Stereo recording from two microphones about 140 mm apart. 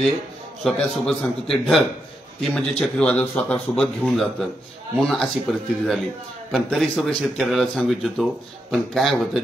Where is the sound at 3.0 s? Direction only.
10° left (ahead or behind).